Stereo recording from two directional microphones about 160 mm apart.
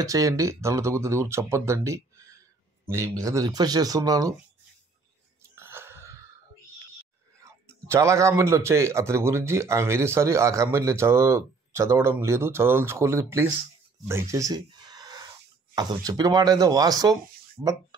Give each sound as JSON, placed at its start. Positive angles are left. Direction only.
{"t": 0.0, "sound": "speech", "side_deg": -20}
{"t": 5.6, "sound": "wheeze", "side_deg": -15}
{"t": 7.4, "sound": "speech", "side_deg": -15}
{"t": 14.0, "sound": "a sound", "side_deg": -20}
{"t": 15.7, "sound": "speech", "side_deg": -25}